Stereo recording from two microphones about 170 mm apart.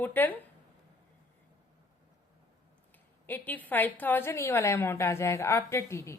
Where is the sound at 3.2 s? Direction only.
10° left (ahead or behind).